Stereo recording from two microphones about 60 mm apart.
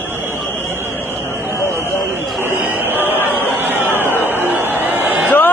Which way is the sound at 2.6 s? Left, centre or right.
Right.